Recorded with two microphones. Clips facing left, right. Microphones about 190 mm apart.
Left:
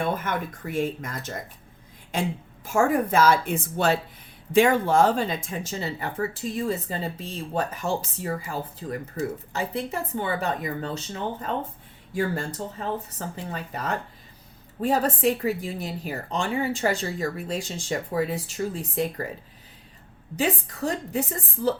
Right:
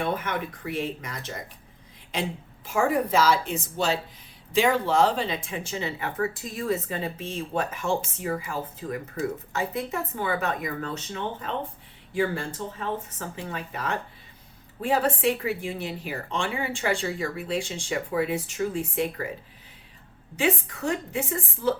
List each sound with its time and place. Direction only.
0.2 s speech: 45° left (ahead or behind)
2.6 s a woman's voice: 45° left (ahead or behind)
20.3 s a woman's voice: 40° left (ahead or behind)